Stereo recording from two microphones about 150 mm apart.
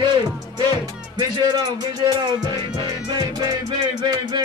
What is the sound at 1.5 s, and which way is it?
Music, 25° right (ahead or behind).